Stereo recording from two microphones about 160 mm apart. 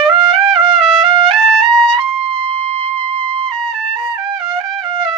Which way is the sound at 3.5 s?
5° left (ahead or behind).